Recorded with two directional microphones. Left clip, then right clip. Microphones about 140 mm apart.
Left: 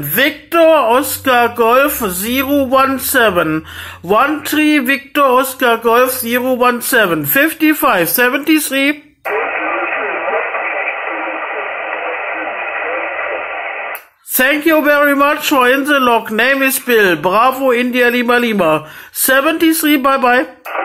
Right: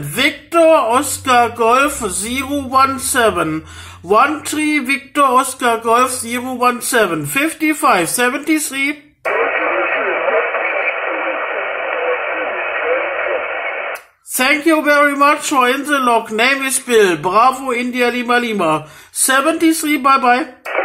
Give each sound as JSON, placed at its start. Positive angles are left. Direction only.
{"t": 0.1, "sound": "speech", "side_deg": 25}
{"t": 9.2, "sound": "radio", "side_deg": -65}
{"t": 14.3, "sound": "speech", "side_deg": 25}